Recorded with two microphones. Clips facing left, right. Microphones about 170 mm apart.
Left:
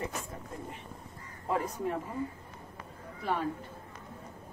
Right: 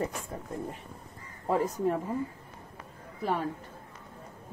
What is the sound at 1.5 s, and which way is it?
Speech, 40° right (ahead or behind).